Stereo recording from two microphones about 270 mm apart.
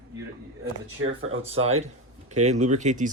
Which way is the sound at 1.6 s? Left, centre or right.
Right.